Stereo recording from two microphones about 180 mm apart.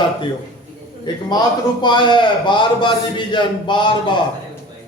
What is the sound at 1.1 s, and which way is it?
A man's voice, 25° left (ahead or behind).